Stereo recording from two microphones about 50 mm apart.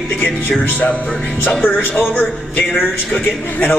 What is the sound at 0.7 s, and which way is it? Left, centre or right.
Speech, left.